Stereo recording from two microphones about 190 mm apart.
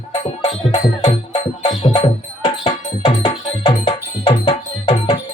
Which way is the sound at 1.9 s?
35° left (ahead or behind).